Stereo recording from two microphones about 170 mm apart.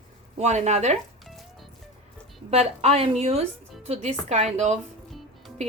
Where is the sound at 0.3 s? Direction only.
40° right (ahead or behind).